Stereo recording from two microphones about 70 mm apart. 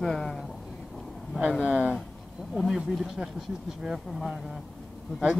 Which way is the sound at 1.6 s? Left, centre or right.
Centre.